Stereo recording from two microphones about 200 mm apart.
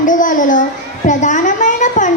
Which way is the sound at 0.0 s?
40° left (ahead or behind).